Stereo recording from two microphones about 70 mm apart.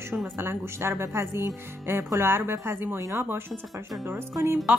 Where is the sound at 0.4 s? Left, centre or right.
Right.